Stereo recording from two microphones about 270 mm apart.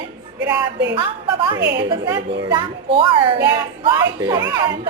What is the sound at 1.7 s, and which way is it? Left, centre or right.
A child's voice, centre.